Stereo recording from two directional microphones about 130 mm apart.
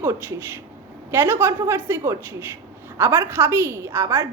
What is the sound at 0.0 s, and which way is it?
A woman's voice, 15° right (ahead or behind).